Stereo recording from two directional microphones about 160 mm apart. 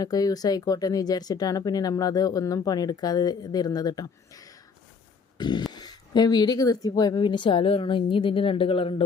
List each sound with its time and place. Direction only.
0.0 s speech: 25° left (ahead or behind)
5.4 s a sound: 30° left (ahead or behind)
5.7 s speech: 25° left (ahead or behind)